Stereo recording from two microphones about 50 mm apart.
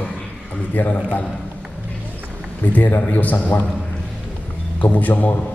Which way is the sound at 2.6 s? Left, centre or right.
Left.